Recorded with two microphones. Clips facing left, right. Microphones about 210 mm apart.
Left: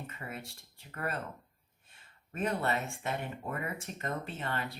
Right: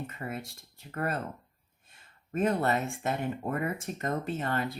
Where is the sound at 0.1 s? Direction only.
40° right (ahead or behind).